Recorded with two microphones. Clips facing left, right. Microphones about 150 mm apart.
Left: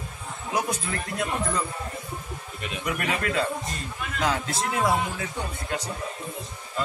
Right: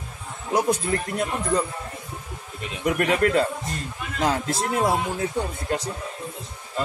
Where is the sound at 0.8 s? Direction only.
35° right (ahead or behind).